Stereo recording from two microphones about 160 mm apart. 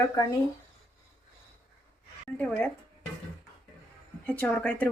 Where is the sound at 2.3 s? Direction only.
10° left (ahead or behind).